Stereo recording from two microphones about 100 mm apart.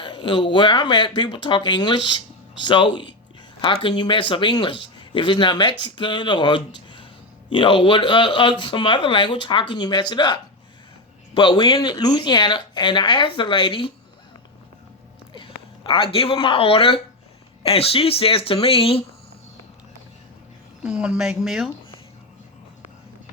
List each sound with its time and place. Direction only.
0.0 s speech: 60° left (ahead or behind)
15.3 s a woman's voice: 55° left (ahead or behind); by 19.0 s 70° left (ahead or behind)
20.8 s speech: 10° right (ahead or behind)